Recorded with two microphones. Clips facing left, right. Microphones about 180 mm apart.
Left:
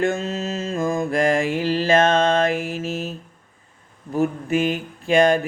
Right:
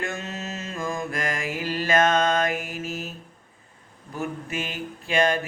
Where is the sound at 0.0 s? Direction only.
35° left (ahead or behind).